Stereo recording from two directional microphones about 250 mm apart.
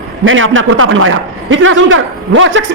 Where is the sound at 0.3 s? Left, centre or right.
Right.